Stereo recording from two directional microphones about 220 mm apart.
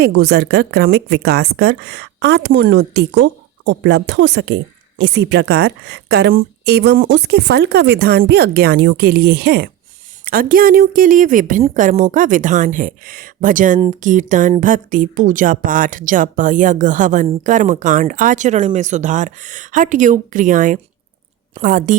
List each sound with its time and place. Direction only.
0.0 s a woman's voice: 50° right (ahead or behind)